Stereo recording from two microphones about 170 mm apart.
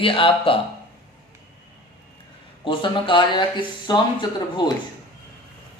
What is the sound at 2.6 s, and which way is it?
Speech, 30° left (ahead or behind).